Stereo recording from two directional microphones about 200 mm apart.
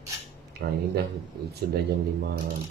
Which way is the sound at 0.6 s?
50° right (ahead or behind).